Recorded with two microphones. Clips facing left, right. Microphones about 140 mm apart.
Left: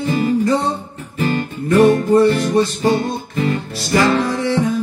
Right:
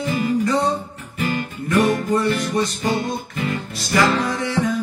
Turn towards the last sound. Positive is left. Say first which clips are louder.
# left 4 dB
turn(degrees=35)  # may be behind; listen again after turning